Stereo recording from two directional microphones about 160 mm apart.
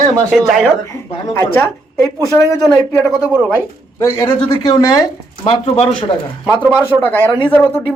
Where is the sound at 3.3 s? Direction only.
15° right (ahead or behind).